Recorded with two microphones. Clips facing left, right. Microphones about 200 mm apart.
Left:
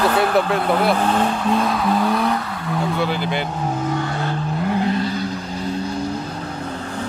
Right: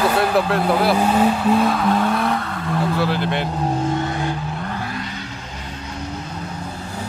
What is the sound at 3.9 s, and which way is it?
Vehicle, 20° right (ahead or behind).